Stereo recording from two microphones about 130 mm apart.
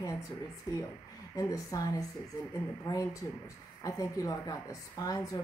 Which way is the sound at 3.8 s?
25° left (ahead or behind).